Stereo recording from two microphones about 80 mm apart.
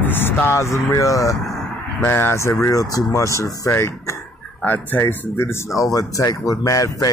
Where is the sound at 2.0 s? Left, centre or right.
Left.